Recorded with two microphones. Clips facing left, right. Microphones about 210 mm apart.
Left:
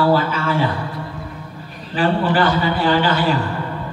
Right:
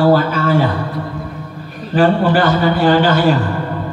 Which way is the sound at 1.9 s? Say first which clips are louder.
Right 5 dB; 45° right (ahead or behind).